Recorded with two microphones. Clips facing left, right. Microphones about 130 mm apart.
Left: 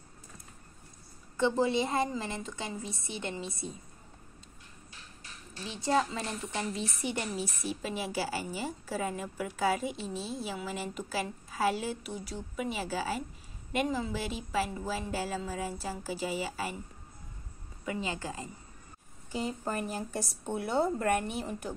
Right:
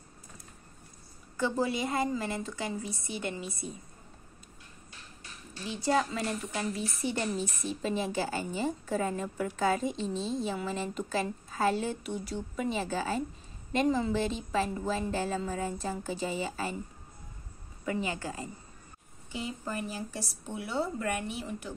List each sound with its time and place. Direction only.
1.3 s a woman's voice: 25° left (ahead or behind)
5.7 s a woman's voice: 20° left (ahead or behind)
17.8 s a woman's voice: 20° left (ahead or behind)
19.3 s a woman's voice: 45° left (ahead or behind)